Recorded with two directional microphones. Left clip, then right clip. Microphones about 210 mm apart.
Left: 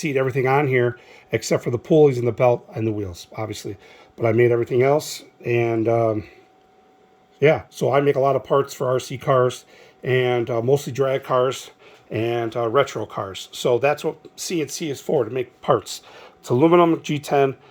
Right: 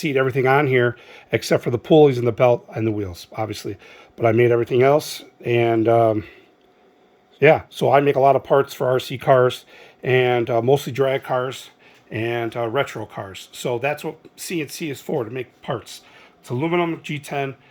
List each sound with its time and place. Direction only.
0.0 s speech: 5° right (ahead or behind)
7.3 s speech: 5° right (ahead or behind); by 11.7 s 15° left (ahead or behind)
12.1 s speech: 5° left (ahead or behind)
15.7 s speech: 25° left (ahead or behind)